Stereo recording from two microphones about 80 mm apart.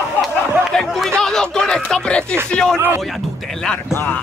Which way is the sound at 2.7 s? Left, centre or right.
Right.